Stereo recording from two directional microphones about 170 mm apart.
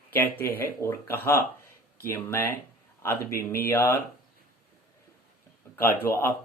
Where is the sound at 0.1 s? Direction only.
10° left (ahead or behind).